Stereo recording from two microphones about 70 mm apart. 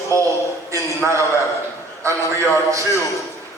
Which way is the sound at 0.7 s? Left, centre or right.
Right.